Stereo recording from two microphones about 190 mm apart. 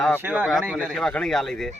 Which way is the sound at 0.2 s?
10° right (ahead or behind).